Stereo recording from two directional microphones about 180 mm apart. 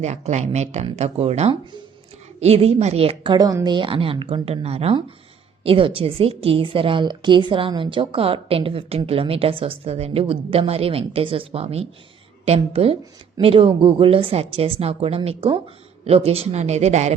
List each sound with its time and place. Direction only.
0.0 s a woman's voice: 40° right (ahead or behind)